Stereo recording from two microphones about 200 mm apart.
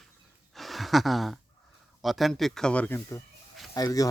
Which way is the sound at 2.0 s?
Centre (ahead or behind).